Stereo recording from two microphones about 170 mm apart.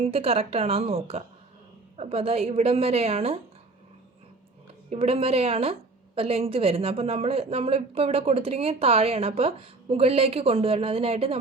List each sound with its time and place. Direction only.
0.0 s a woman's voice: 35° right (ahead or behind)
4.9 s a woman's voice: 35° right (ahead or behind)